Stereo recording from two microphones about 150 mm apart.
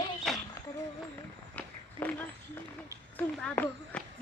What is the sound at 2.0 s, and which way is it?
Speech, 10° left (ahead or behind).